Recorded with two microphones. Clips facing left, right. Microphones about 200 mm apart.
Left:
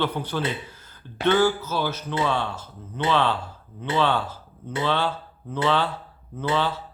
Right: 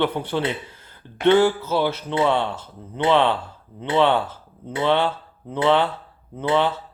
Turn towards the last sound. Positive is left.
turn(degrees=-20)  # may be behind; listen again after turning